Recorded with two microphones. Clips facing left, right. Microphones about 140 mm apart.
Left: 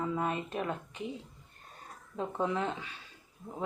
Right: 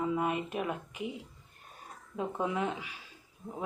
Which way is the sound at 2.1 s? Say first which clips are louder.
Even; 10° right (ahead or behind).